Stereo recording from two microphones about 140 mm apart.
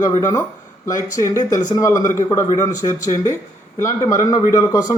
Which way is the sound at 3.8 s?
20° left (ahead or behind).